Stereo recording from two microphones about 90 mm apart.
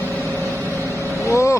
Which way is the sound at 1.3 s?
35° left (ahead or behind).